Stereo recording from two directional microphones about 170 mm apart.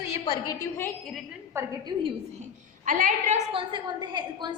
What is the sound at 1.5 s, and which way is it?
Speech, 25° right (ahead or behind).